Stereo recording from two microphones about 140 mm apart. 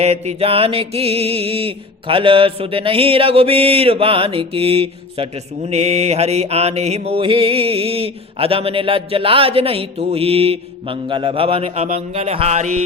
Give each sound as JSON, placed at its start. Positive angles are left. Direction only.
{"t": 0.0, "sound": "mantra", "side_deg": -50}